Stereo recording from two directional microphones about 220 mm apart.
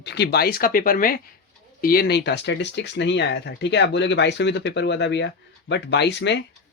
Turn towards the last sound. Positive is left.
turn(degrees=50)  # may be behind; listen again after turning